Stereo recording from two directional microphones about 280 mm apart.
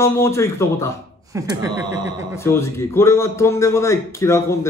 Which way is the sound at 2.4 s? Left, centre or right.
Centre.